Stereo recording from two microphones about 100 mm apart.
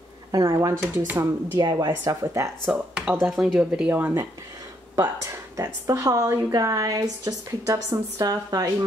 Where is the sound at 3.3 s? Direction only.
5° right (ahead or behind).